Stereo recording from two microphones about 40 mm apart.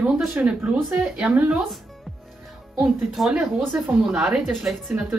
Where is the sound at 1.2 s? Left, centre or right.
Right.